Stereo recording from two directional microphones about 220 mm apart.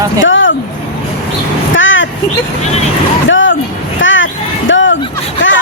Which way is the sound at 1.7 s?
60° left (ahead or behind).